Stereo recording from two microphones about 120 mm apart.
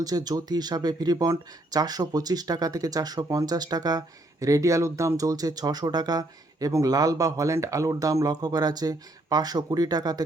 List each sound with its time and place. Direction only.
0.0 s speech: 30° right (ahead or behind)